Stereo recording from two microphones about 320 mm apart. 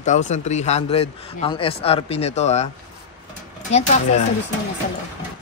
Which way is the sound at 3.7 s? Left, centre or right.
Left.